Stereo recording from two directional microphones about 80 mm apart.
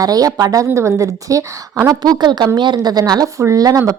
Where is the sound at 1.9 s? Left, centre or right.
Right.